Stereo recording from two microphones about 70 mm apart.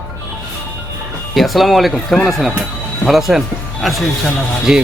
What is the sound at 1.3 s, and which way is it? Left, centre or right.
Speech, centre.